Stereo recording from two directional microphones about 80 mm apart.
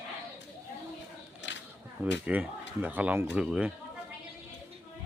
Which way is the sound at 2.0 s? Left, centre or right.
Centre.